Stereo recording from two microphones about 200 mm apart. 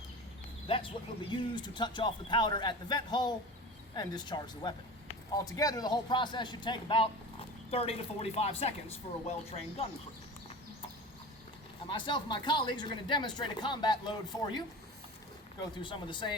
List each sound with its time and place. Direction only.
0.7 s a man's voice: 25° left (ahead or behind)
11.9 s a man's voice: 25° left (ahead or behind)
15.7 s a man's voice: 25° left (ahead or behind)